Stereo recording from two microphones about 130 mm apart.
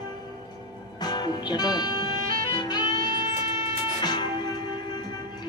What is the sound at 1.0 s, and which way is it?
Music, 35° left (ahead or behind).